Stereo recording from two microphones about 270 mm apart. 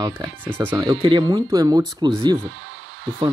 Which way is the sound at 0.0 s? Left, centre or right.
Centre.